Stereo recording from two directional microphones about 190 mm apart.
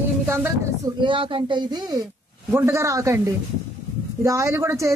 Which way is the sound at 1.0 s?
25° right (ahead or behind).